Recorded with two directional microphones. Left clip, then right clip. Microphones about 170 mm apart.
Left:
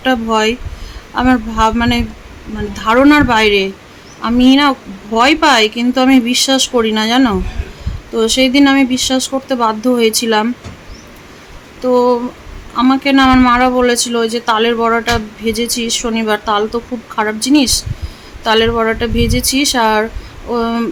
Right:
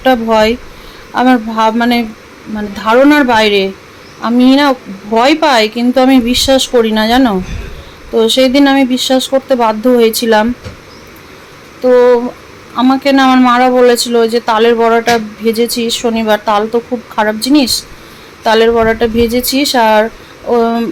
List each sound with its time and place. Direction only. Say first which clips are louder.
0.0 s speech: right 4 dB; 20° right (ahead or behind)
11.8 s speech: right 5 dB; 20° right (ahead or behind)